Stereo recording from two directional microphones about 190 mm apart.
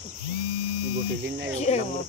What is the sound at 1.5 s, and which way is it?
Speech, 35° left (ahead or behind).